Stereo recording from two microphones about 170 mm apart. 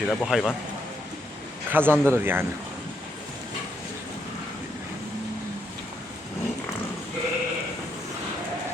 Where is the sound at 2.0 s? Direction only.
15° right (ahead or behind).